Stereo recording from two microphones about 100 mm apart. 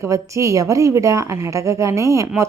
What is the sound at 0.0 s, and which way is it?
A woman's voice, 30° right (ahead or behind).